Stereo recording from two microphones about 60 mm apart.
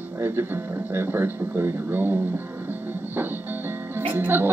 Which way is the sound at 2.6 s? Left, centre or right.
Right.